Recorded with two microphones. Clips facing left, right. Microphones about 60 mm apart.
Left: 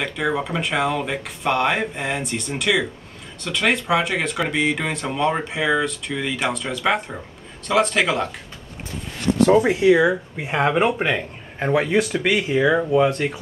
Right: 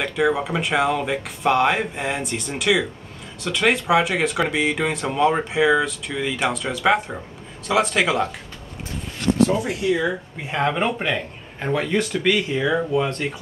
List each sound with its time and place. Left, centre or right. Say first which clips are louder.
0.0 s speech: right 2 dB; centre
9.7 s speech: left 7 dB; left
10.0 s speech: left 4 dB; centre